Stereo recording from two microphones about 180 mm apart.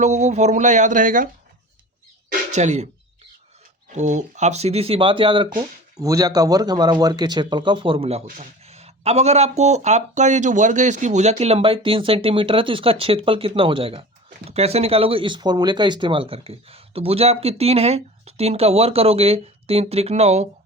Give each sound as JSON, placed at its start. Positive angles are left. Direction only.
{"t": 0.0, "sound": "speech", "side_deg": -40}
{"t": 2.5, "sound": "speech", "side_deg": -40}
{"t": 3.9, "sound": "speech", "side_deg": -40}